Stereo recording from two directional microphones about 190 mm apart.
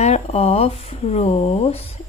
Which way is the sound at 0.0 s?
35° left (ahead or behind).